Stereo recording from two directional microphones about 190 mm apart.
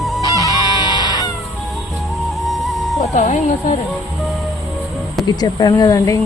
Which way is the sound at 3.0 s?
35° left (ahead or behind).